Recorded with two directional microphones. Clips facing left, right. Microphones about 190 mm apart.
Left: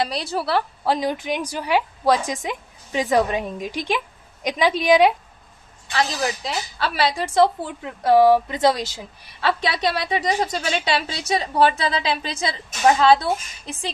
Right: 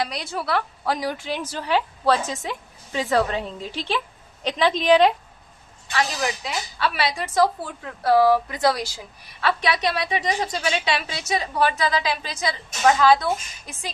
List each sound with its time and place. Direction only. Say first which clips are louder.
0.0 s a woman's voice: left 4 dB; 30° left (ahead or behind); by 5.1 s 10° left (ahead or behind)
5.9 s a woman's voice: left 2 dB; 30° left (ahead or behind)